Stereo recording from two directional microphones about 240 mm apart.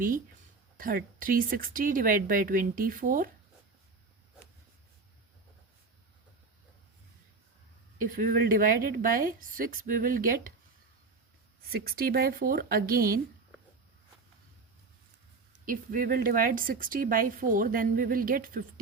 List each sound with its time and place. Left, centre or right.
0.8 s a woman's voice: right
7.9 s a woman's voice: right
11.7 s a woman's voice: right
15.6 s a woman's voice: right